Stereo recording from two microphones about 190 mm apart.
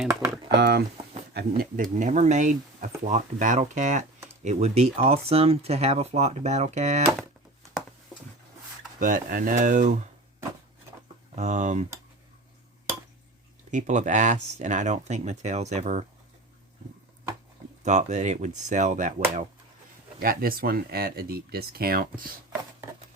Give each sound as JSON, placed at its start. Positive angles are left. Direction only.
{"t": 0.5, "sound": "speech", "side_deg": -60}
{"t": 9.0, "sound": "speech", "side_deg": -45}
{"t": 11.3, "sound": "speech", "side_deg": -40}
{"t": 13.7, "sound": "speech", "side_deg": -40}
{"t": 17.8, "sound": "speech", "side_deg": -40}